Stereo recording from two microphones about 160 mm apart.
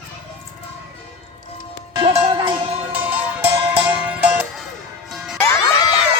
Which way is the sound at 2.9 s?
10° right (ahead or behind).